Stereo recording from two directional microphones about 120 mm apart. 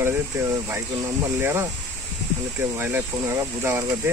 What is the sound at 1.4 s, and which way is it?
Speech, 20° right (ahead or behind).